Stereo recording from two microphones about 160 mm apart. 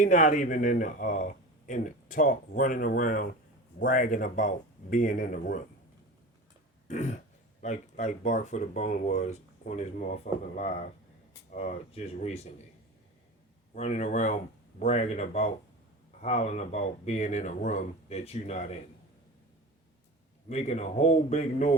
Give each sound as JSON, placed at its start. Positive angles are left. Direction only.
{"t": 0.0, "sound": "speech", "side_deg": 55}
{"t": 6.8, "sound": "throat clearing", "side_deg": 50}
{"t": 7.6, "sound": "speech", "side_deg": 50}
{"t": 13.7, "sound": "speech", "side_deg": 45}
{"t": 20.5, "sound": "speech", "side_deg": 40}